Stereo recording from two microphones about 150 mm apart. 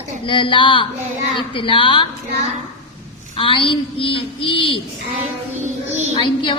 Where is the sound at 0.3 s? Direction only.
35° left (ahead or behind).